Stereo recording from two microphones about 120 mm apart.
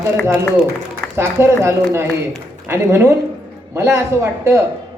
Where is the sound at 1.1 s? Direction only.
20° right (ahead or behind).